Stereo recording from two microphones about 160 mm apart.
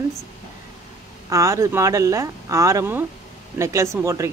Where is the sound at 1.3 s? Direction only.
20° right (ahead or behind).